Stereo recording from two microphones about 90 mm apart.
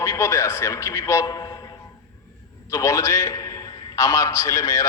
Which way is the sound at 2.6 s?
35° left (ahead or behind).